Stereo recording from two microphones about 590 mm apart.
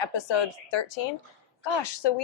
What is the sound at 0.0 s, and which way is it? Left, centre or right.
Speech, left.